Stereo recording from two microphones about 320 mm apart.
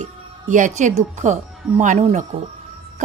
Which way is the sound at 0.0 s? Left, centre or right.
Right.